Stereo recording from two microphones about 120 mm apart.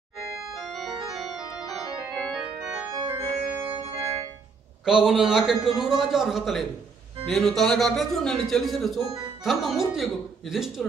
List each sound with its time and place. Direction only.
0.3 s organ: 5° right (ahead or behind)
1.6 s keyboard: centre (ahead or behind)
2.4 s organ: 5° right (ahead or behind)
3.1 s organ: 20° right (ahead or behind)
3.7 s organ: 50° right (ahead or behind)
4.8 s a man's voice: 5° right (ahead or behind)